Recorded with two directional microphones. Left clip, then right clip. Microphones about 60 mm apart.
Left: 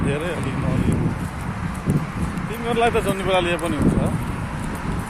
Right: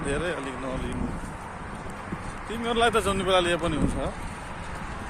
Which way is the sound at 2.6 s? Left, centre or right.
Right.